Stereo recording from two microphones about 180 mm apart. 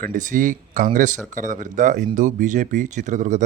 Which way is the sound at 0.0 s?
45° right (ahead or behind).